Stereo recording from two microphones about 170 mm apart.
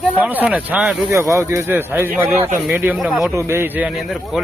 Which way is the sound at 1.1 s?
15° right (ahead or behind).